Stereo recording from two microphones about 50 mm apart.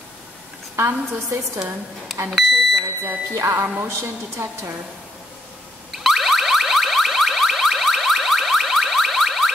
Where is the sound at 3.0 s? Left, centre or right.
Right.